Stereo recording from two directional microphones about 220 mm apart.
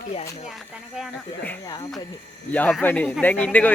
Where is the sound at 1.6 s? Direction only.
20° left (ahead or behind).